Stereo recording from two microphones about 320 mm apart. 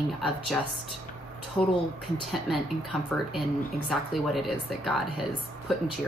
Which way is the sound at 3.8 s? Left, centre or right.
Centre.